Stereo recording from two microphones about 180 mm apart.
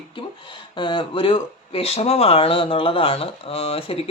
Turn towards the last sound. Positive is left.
turn(degrees=30)  # may be behind; listen again after turning